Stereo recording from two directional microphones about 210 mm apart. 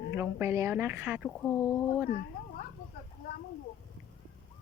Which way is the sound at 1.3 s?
10° left (ahead or behind).